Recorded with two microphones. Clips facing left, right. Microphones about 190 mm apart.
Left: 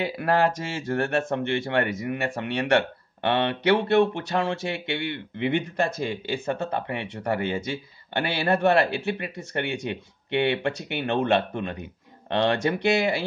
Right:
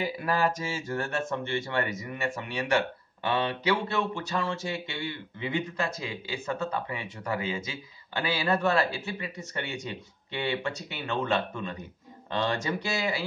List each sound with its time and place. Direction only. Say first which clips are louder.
0.0 s speech: left 5 dB; 65° left (ahead or behind)